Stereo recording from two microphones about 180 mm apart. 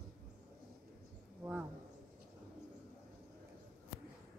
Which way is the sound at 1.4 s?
10° right (ahead or behind).